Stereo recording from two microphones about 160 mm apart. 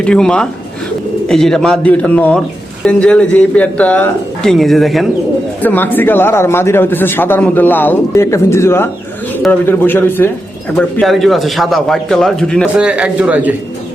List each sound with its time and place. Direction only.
0.0 s a man's voice: 5° left (ahead or behind)
5.6 s a man's voice: 10° left (ahead or behind)
10.8 s a man's voice: 5° left (ahead or behind)
12.8 s a man's voice: 5° right (ahead or behind)